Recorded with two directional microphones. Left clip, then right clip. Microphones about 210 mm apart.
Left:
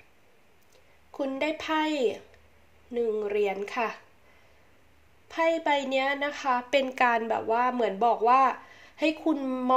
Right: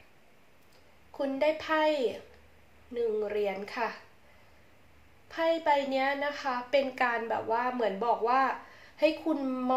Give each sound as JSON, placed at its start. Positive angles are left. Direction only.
{"t": 1.1, "sound": "a woman's voice", "side_deg": 35}
{"t": 5.3, "sound": "a woman's voice", "side_deg": 35}